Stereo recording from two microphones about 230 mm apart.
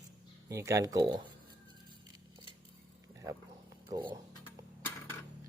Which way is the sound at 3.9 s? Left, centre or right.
Centre.